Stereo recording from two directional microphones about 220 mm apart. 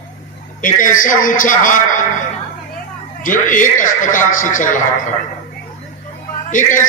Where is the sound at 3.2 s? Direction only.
35° left (ahead or behind).